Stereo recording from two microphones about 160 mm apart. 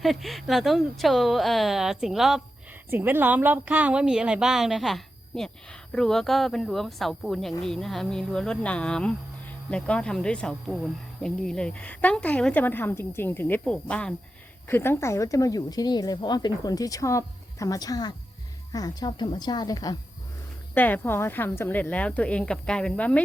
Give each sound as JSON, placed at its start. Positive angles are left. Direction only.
{"t": 0.0, "sound": "speech", "side_deg": 0}
{"t": 2.9, "sound": "a woman's voice", "side_deg": -15}
{"t": 20.7, "sound": "speech", "side_deg": 10}